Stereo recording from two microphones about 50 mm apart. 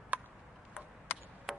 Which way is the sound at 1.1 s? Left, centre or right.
Left.